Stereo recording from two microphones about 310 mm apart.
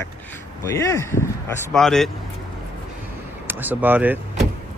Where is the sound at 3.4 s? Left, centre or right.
Centre.